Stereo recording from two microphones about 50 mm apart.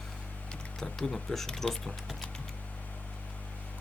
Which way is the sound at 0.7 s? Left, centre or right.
Centre.